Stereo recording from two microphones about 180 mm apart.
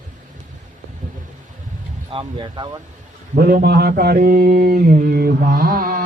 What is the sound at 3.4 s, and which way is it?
Speech, 60° right (ahead or behind).